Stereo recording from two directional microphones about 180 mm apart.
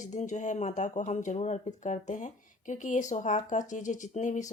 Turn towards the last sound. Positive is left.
turn(degrees=40)  # may be behind; listen again after turning